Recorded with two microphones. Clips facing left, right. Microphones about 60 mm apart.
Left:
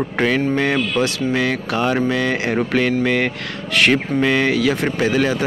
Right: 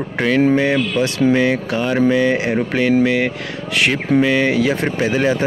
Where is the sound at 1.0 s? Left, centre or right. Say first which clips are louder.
Right 4 dB; right.